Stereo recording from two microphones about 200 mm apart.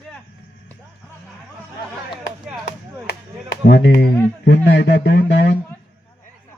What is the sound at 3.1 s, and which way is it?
Speech, 55° left (ahead or behind).